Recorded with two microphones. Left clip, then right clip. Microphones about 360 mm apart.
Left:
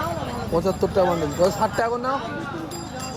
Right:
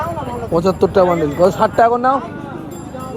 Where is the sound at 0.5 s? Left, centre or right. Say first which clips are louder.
Right 8 dB; right.